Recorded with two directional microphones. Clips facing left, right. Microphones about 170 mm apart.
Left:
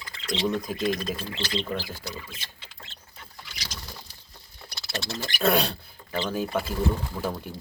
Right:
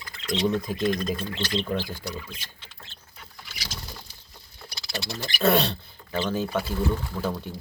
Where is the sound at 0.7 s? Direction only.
5° left (ahead or behind).